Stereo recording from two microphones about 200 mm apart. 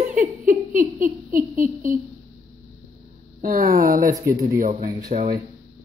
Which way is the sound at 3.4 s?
45° right (ahead or behind).